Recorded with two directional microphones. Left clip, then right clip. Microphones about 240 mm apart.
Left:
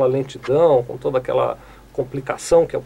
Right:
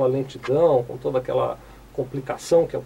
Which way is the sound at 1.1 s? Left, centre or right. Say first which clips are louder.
Left 4 dB; centre.